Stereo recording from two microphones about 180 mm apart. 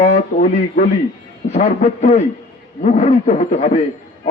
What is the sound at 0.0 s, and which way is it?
A man's voice, 40° left (ahead or behind).